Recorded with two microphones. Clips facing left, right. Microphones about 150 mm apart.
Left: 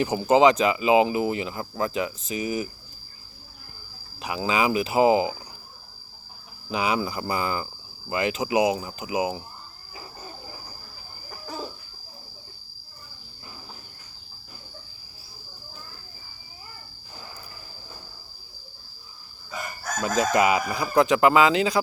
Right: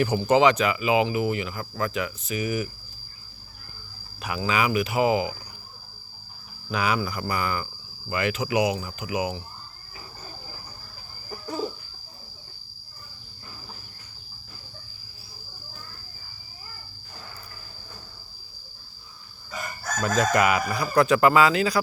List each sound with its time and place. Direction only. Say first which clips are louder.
0.0 s speech: left 1 dB; 25° left (ahead or behind)
4.2 s speech: left 1 dB; 20° left (ahead or behind)
6.7 s speech: left 1 dB; 20° left (ahead or behind)
19.8 s chicken: right 1 dB; 5° left (ahead or behind)
20.3 s speech: left 1 dB; 20° left (ahead or behind)